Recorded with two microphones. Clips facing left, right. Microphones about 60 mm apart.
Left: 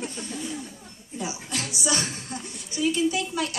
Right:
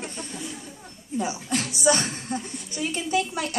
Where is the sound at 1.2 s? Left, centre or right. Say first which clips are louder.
Right 4 dB; right.